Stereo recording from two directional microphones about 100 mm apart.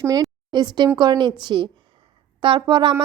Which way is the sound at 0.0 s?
40° right (ahead or behind).